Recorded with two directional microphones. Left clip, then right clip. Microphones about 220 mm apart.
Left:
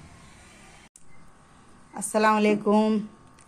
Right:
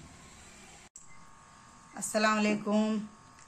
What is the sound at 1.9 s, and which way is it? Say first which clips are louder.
Speech: left 7 dB; 30° left (ahead or behind).